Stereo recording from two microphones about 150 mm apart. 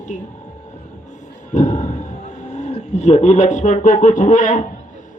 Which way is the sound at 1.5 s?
50° left (ahead or behind).